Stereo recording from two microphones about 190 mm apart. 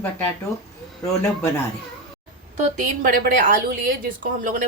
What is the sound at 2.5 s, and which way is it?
A woman's voice, 45° right (ahead or behind).